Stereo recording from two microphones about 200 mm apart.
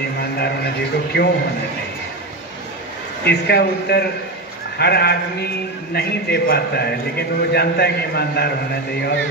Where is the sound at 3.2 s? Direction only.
55° left (ahead or behind).